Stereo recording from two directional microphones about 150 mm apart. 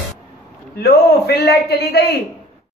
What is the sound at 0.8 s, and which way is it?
A man's voice, 90° left.